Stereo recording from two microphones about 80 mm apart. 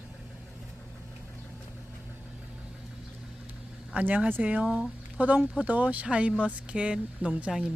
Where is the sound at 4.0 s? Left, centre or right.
Centre.